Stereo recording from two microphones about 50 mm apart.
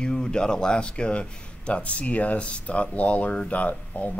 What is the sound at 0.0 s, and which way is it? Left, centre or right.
Speech, centre.